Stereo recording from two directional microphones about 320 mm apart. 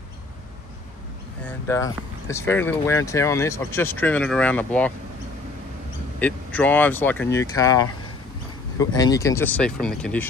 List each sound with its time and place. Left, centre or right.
1.7 s speech: centre
6.1 s speech: centre